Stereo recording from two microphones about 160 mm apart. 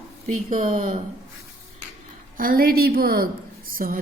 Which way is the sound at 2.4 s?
65° right (ahead or behind).